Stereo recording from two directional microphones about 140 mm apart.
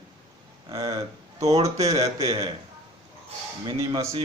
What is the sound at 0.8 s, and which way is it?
A man's voice, 25° right (ahead or behind).